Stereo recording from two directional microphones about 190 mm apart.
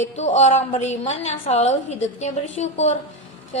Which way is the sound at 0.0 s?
35° left (ahead or behind).